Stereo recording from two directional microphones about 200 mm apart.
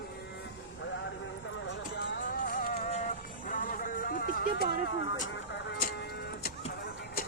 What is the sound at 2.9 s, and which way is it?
Vehicle, 40° left (ahead or behind).